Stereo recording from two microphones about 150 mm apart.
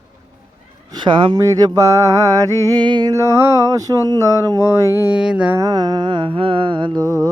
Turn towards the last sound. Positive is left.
turn(degrees=-25)  # may be behind; listen again after turning